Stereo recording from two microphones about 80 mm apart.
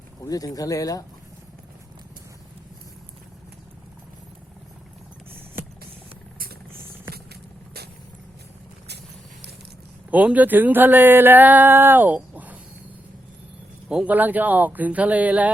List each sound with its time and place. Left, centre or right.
0.3 s speech: left
10.1 s speech: centre
13.8 s speech: centre
14.1 s speech: right